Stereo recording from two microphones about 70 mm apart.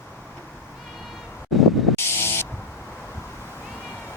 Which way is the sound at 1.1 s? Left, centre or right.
Centre.